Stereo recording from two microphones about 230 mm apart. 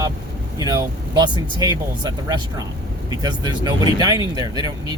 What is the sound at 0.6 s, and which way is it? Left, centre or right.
Vehicle, centre.